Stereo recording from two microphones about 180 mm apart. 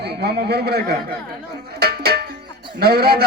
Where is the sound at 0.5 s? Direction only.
60° right (ahead or behind).